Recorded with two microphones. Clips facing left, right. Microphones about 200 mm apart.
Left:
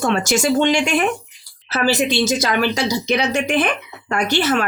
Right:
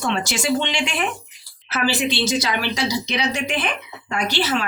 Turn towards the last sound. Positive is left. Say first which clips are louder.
# left 4 dB
turn(degrees=50)  # may be behind; listen again after turning